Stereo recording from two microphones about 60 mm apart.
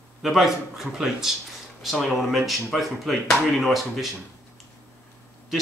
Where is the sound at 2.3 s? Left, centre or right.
Centre.